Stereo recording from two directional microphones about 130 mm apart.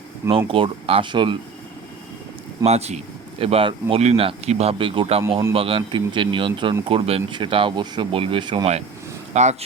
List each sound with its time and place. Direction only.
0.3 s speech: 45° right (ahead or behind)
2.6 s speech: 55° right (ahead or behind)
3.4 s speech: 45° right (ahead or behind)
9.3 s speech: 60° right (ahead or behind)